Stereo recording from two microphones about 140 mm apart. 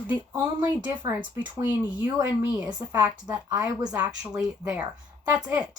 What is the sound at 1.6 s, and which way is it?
Speech, 10° right (ahead or behind).